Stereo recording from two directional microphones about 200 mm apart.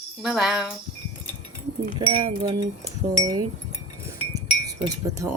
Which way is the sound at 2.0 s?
20° right (ahead or behind).